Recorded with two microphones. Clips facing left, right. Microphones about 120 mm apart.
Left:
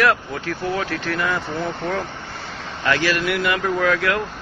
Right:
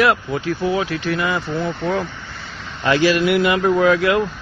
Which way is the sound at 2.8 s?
20° right (ahead or behind).